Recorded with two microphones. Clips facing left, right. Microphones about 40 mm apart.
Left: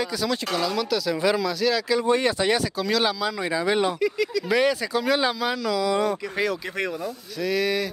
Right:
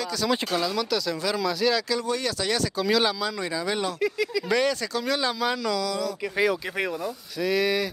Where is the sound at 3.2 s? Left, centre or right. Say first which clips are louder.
Left 4 dB; centre.